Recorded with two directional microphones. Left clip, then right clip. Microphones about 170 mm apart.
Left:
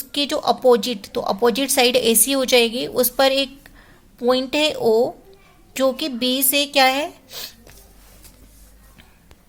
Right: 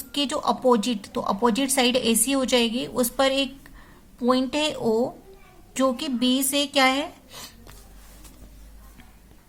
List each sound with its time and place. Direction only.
0.1 s speech: 20° left (ahead or behind)